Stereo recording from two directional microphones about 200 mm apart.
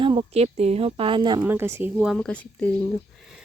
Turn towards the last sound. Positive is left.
turn(degrees=0)  # may be behind; listen again after turning